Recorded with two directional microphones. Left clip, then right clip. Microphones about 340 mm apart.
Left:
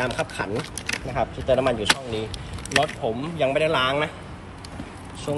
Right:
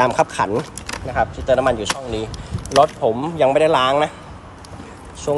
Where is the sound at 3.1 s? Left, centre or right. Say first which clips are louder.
Right 7 dB; centre.